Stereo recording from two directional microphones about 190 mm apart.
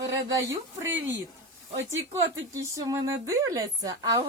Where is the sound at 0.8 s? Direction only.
10° right (ahead or behind).